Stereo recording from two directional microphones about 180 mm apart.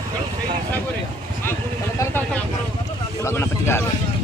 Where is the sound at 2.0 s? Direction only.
10° left (ahead or behind).